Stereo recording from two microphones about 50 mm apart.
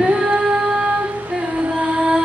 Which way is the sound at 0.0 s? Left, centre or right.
Centre.